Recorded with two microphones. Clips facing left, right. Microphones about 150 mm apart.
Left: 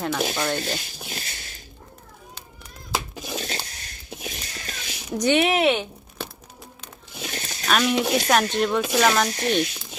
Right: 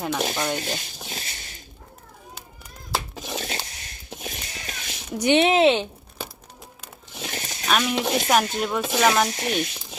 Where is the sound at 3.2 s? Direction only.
5° left (ahead or behind).